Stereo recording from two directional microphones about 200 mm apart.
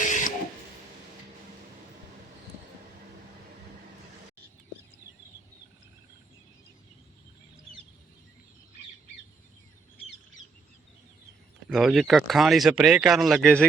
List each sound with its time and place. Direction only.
0.0 s printer: 40° left (ahead or behind)
11.7 s speech: centre (ahead or behind)